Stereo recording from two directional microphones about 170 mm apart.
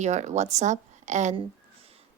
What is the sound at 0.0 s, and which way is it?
A woman's voice, 45° right (ahead or behind).